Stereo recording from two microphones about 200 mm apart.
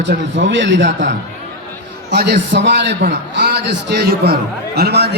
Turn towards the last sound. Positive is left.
turn(degrees=-55)  # may be behind; listen again after turning